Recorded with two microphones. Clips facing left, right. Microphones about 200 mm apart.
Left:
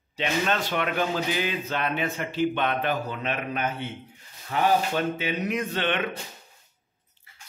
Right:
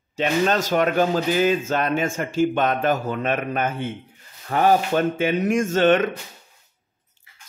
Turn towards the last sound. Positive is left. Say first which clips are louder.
# right 10 dB
turn(degrees=-45)  # may be behind; listen again after turning